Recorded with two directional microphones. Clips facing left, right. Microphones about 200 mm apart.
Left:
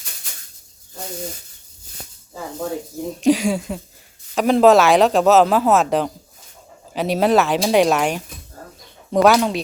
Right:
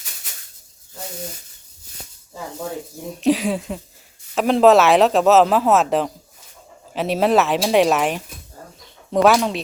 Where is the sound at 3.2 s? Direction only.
Centre (ahead or behind).